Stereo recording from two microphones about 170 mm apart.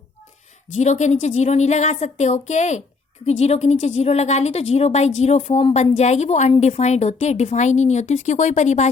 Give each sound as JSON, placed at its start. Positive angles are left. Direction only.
{"t": 0.8, "sound": "a woman's voice", "side_deg": 45}